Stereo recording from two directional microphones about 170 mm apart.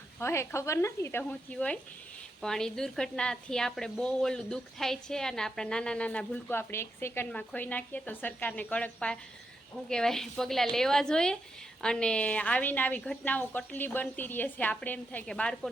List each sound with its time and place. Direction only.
0.2 s a woman's voice: 15° left (ahead or behind)